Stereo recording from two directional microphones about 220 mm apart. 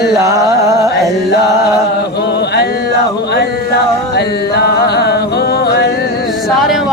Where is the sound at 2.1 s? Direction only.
50° left (ahead or behind).